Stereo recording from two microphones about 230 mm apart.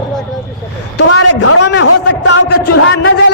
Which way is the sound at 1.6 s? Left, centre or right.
Left.